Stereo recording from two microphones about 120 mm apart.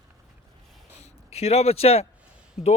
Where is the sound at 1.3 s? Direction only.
60° left (ahead or behind).